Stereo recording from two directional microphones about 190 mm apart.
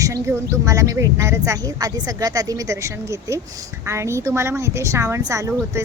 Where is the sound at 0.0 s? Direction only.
15° right (ahead or behind).